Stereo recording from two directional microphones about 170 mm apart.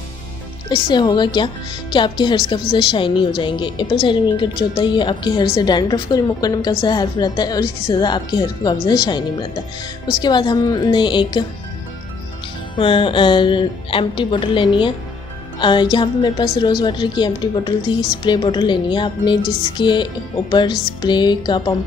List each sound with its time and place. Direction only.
0.7 s a woman's voice: 25° left (ahead or behind)
10.2 s a woman's voice: 25° left (ahead or behind)
12.7 s a woman's voice: 30° left (ahead or behind)